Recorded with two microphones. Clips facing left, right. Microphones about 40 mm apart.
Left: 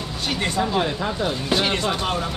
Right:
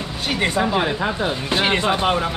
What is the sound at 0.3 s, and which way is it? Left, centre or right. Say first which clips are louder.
Speech: right 3 dB; centre.